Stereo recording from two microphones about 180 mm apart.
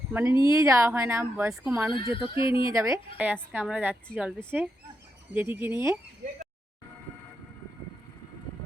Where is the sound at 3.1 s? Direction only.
5° right (ahead or behind).